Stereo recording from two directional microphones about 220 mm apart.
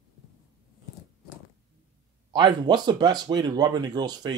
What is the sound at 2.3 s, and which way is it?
A man's voice, 20° right (ahead or behind).